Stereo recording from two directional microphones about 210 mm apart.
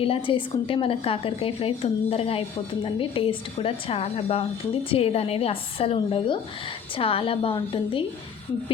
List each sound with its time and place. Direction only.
0.0 s a woman's voice: 25° left (ahead or behind)